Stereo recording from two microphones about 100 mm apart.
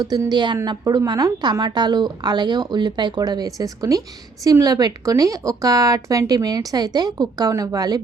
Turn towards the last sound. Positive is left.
turn(degrees=-40)  # may be behind; listen again after turning